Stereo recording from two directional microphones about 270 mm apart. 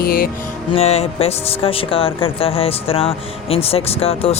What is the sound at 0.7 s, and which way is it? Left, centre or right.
Speech, left.